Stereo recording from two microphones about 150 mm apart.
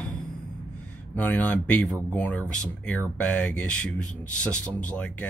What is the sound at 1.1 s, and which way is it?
Speech, 10° left (ahead or behind).